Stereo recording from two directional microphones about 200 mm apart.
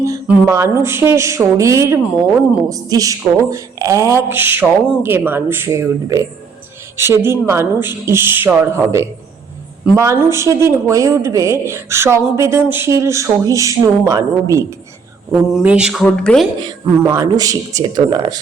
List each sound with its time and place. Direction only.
0.0 s speech: 15° right (ahead or behind)
15.5 s speech: 5° right (ahead or behind)
16.6 s speech: 15° right (ahead or behind)